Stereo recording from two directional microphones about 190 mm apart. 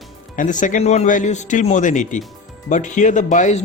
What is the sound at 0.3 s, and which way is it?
Speech, 45° left (ahead or behind).